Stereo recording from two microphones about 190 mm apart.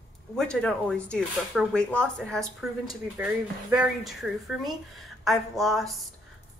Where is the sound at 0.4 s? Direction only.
5° left (ahead or behind).